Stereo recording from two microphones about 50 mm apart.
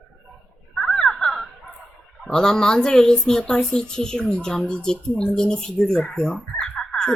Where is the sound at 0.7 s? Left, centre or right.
Centre.